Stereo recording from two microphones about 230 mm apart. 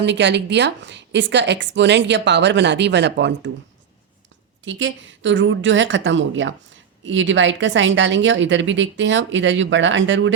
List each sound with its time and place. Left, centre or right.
0.0 s a woman's voice: right
4.6 s a woman's voice: right